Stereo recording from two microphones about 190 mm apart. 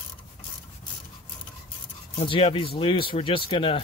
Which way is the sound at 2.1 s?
30° left (ahead or behind).